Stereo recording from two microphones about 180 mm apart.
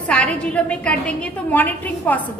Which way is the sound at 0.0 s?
5° left (ahead or behind).